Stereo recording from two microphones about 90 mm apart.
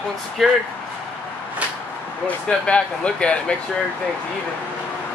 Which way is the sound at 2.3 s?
10° left (ahead or behind).